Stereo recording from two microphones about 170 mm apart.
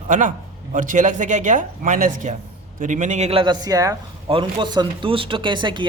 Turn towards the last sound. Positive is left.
turn(degrees=-30)  # may be behind; listen again after turning